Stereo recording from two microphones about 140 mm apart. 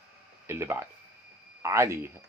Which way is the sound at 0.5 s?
20° right (ahead or behind).